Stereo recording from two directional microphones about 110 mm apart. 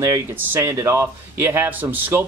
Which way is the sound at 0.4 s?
20° right (ahead or behind).